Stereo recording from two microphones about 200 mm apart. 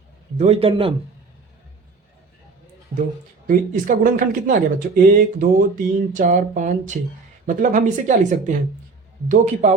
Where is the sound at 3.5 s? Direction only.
40° right (ahead or behind).